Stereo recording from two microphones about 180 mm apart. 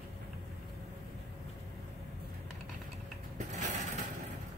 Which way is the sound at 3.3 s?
40° right (ahead or behind).